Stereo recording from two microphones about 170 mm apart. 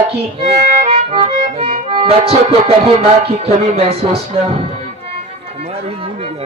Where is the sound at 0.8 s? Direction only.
35° right (ahead or behind).